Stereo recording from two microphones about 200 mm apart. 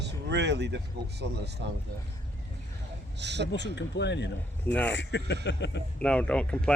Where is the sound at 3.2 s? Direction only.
60° right (ahead or behind).